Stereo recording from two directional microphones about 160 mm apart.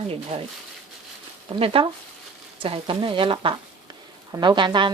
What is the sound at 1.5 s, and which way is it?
A woman's voice, 35° right (ahead or behind).